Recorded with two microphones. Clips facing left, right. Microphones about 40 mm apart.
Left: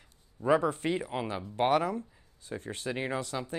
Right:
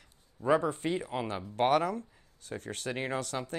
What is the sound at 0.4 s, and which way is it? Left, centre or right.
Speech, centre.